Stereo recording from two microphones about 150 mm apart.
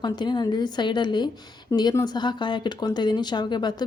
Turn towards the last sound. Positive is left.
turn(degrees=30)  # may be behind; listen again after turning